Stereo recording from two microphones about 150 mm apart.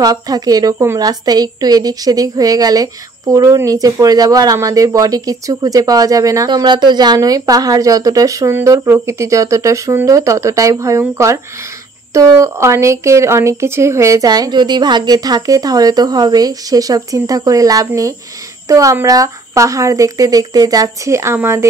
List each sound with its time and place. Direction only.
0.0 s speech: 25° right (ahead or behind)